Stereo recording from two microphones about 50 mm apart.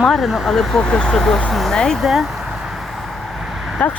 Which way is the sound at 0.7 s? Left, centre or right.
Centre.